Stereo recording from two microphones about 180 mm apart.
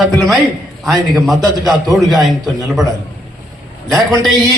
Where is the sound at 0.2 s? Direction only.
Centre (ahead or behind).